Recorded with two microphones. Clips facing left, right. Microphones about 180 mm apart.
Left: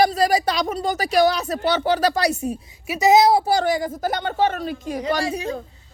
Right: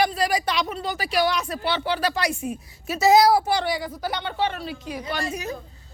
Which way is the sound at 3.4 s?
40° left (ahead or behind).